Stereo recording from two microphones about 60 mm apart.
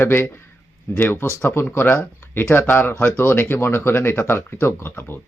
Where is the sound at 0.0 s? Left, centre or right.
Left.